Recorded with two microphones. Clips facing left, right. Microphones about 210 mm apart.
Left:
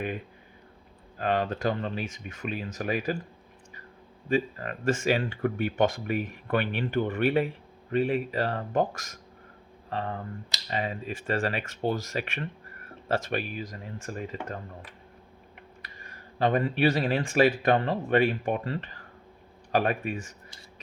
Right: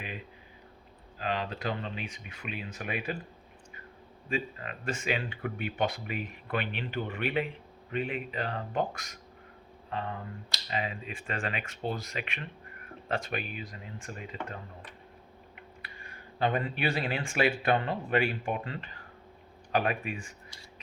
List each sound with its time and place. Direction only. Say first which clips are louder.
1.2 s speech: left 6 dB; 50° left (ahead or behind)
4.3 s speech: left 7 dB; 40° left (ahead or behind)
11.8 s speech: left 7 dB; 50° left (ahead or behind)
16.0 s speech: left 3 dB; 40° left (ahead or behind)